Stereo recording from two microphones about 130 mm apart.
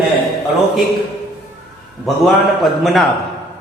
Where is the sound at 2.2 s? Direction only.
Centre (ahead or behind).